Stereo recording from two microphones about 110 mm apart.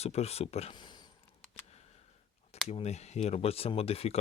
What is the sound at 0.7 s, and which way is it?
Speech, 45° left (ahead or behind).